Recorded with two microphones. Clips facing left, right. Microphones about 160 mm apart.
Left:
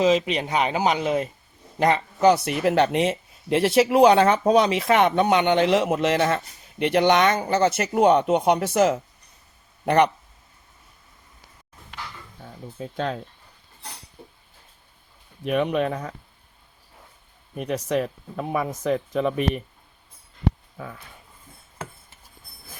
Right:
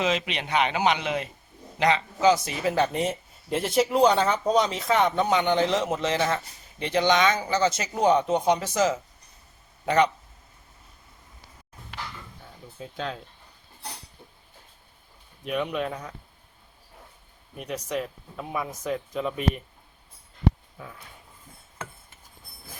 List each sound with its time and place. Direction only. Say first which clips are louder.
0.3 s speech: left 2 dB; 40° left (ahead or behind); by 10.1 s 60° left (ahead or behind)
12.8 s speech: left 5 dB; 45° left (ahead or behind)
15.4 s speech: left 6 dB; 50° left (ahead or behind)
17.8 s speech: left 5 dB; 50° left (ahead or behind)